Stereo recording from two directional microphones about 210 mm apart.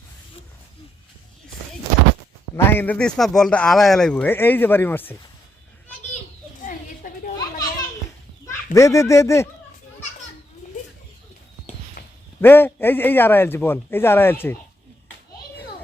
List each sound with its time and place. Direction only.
2.6 s speech: 10° left (ahead or behind)
6.7 s a sound: 40° left (ahead or behind)
8.4 s speech: 15° left (ahead or behind)
10.6 s bird: 35° left (ahead or behind)
12.4 s speech: 10° left (ahead or behind)